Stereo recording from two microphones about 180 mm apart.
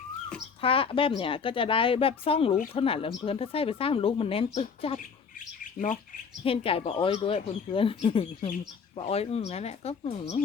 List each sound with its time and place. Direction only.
0.6 s speech: 30° left (ahead or behind)